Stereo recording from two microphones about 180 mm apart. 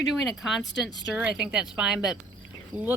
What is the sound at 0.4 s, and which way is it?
Speech, centre (ahead or behind).